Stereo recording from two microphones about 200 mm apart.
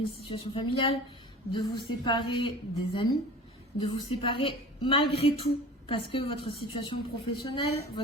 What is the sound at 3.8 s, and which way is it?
Speech, 25° left (ahead or behind).